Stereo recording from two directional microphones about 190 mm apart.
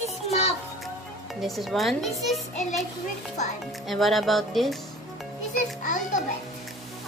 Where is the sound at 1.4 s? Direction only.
Centre (ahead or behind).